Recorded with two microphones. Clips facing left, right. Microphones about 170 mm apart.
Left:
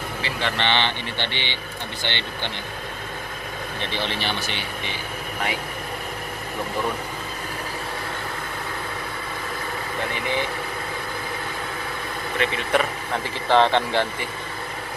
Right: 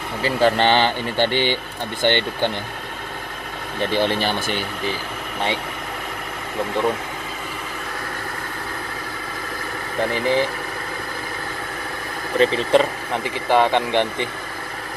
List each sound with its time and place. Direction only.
0.2 s speech: 40° right (ahead or behind)
3.9 s speech: 45° right (ahead or behind)
10.0 s speech: 35° right (ahead or behind)
12.4 s speech: 35° right (ahead or behind)
13.1 s speech: 10° right (ahead or behind)